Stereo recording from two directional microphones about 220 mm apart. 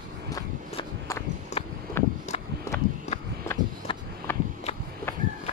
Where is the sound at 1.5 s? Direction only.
30° left (ahead or behind).